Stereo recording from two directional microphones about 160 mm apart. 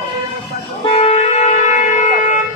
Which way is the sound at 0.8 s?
35° left (ahead or behind).